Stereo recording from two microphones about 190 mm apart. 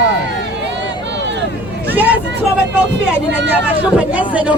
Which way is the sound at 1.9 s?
10° right (ahead or behind).